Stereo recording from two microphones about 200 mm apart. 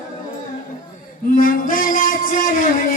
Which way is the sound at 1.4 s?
45° left (ahead or behind).